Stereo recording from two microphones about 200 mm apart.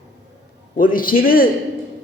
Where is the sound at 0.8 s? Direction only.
45° left (ahead or behind).